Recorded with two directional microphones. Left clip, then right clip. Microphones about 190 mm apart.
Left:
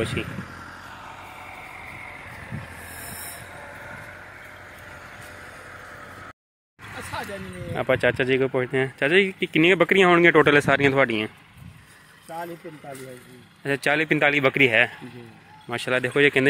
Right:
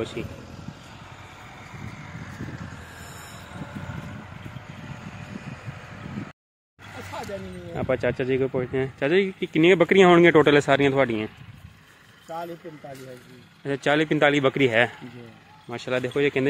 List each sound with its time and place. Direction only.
0.8 s vehicle: 30° left (ahead or behind)
6.8 s a sound: 50° right (ahead or behind)
7.7 s speech: 5° right (ahead or behind)
13.7 s speech: 15° right (ahead or behind)
15.7 s speech: centre (ahead or behind)